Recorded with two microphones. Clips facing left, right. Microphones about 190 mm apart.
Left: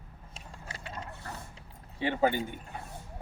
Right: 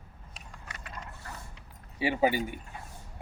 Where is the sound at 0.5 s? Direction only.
30° left (ahead or behind).